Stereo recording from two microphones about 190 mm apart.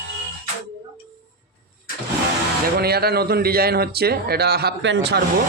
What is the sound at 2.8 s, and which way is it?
Speech, 55° right (ahead or behind).